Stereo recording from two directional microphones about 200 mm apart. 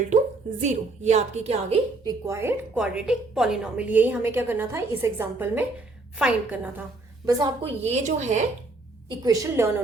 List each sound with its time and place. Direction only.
0.6 s a woman's voice: 35° right (ahead or behind)
2.0 s a woman's voice: 15° right (ahead or behind)
7.3 s a woman's voice: 20° right (ahead or behind)
7.8 s a woman's voice: 35° right (ahead or behind)
9.0 s a woman's voice: 20° right (ahead or behind)